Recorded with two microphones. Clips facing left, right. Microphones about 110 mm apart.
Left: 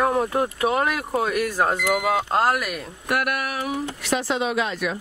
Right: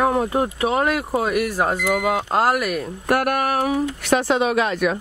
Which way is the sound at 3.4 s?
55° right (ahead or behind).